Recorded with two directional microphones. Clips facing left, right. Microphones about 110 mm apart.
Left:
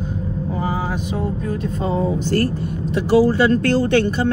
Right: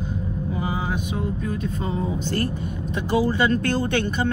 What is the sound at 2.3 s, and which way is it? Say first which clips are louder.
Speech: left 6 dB; 15° right (ahead or behind).